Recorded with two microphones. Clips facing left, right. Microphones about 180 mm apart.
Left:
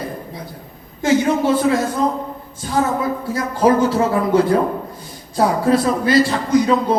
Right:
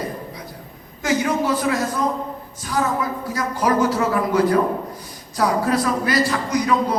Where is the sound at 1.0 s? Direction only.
25° left (ahead or behind).